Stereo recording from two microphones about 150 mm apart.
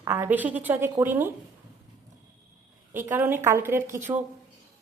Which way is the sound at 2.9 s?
15° right (ahead or behind).